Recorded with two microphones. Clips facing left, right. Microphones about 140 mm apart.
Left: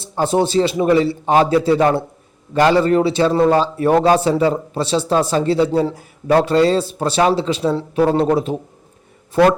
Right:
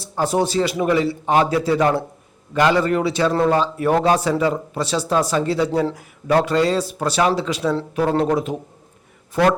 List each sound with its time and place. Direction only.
0.0 s speech: 25° left (ahead or behind)